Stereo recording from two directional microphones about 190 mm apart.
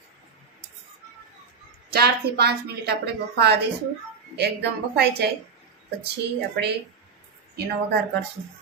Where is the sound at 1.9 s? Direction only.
55° right (ahead or behind).